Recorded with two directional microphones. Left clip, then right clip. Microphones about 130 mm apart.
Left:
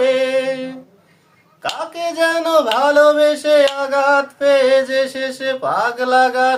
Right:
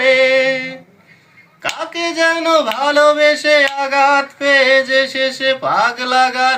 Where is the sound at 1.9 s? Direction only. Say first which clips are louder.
Right 2 dB; 40° left (ahead or behind).